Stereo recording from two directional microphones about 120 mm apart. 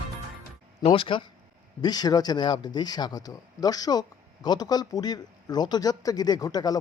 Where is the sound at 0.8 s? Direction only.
45° left (ahead or behind).